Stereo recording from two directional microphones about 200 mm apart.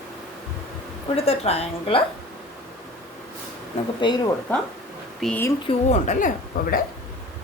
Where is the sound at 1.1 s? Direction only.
30° left (ahead or behind).